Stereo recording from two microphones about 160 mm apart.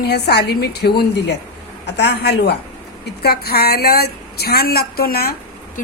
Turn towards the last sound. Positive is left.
turn(degrees=70)  # may be behind; listen again after turning